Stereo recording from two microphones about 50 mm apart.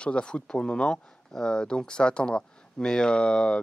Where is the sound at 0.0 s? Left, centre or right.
Centre.